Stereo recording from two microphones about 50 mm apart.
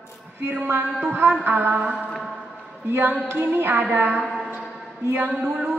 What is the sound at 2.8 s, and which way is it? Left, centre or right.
Female singing, right.